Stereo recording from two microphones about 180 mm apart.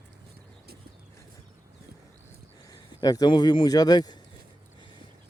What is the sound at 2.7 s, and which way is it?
Speech, 20° left (ahead or behind).